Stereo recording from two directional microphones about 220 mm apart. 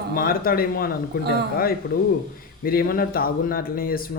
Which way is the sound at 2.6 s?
40° left (ahead or behind).